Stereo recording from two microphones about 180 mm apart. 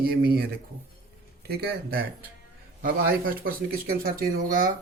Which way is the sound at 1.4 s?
60° right (ahead or behind).